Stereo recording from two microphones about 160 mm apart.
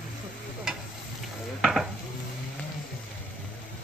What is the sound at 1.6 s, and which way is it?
Stir, centre (ahead or behind).